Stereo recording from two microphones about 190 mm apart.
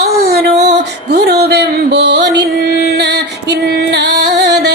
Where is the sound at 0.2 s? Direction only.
55° right (ahead or behind).